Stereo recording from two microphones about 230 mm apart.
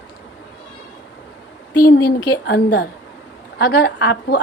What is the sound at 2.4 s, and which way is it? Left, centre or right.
A woman's voice, left.